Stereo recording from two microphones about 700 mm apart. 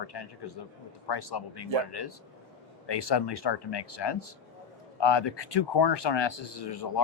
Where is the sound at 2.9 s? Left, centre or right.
Left.